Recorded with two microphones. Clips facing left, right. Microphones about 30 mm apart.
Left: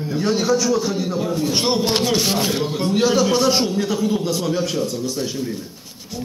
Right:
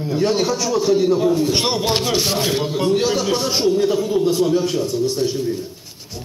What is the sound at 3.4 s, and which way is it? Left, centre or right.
Speech, left.